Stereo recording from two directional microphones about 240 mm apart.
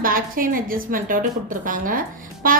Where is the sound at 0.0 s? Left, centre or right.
Right.